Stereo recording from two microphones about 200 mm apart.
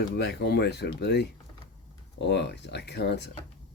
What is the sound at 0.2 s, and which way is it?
Speech, 55° left (ahead or behind).